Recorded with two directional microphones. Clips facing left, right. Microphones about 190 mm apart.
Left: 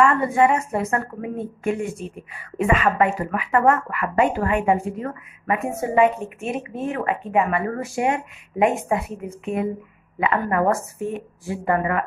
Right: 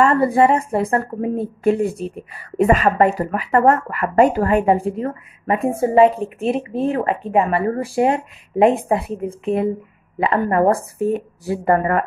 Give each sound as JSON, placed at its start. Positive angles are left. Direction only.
{"t": 0.0, "sound": "a woman's voice", "side_deg": -35}